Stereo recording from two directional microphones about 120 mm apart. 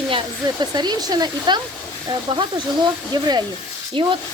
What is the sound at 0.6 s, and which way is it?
Speech, 35° right (ahead or behind).